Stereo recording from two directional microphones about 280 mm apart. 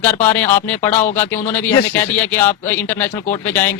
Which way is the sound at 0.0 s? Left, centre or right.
Centre.